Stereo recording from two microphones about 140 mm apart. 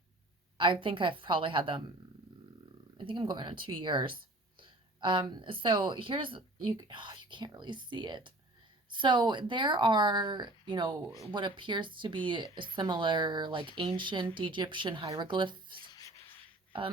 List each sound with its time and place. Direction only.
0.5 s speech: 35° right (ahead or behind)
3.0 s speech: 35° right (ahead or behind)
15.9 s rub: 25° left (ahead or behind)